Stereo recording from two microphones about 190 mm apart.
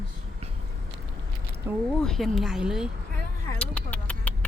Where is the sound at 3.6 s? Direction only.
5° left (ahead or behind).